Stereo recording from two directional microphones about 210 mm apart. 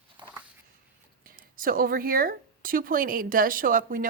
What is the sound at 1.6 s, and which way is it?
A woman's voice, 40° right (ahead or behind).